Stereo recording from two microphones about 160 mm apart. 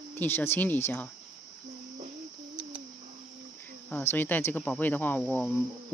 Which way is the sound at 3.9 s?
15° left (ahead or behind).